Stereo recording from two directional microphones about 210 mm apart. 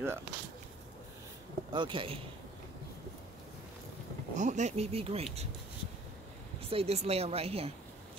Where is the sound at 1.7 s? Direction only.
20° right (ahead or behind).